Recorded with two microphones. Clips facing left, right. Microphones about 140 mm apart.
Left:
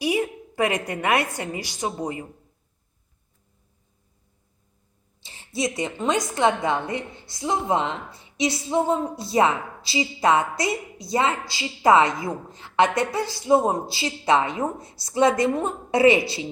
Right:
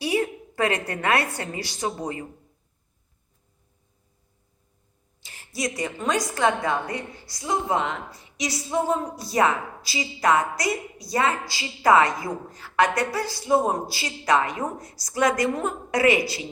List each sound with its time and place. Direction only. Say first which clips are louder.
0.0 s a woman's voice: left 1 dB; 15° left (ahead or behind)
5.2 s a woman's voice: left 3 dB; 25° left (ahead or behind)